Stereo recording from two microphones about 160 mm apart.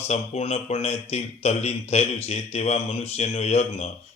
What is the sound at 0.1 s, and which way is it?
A man's voice, 40° left (ahead or behind).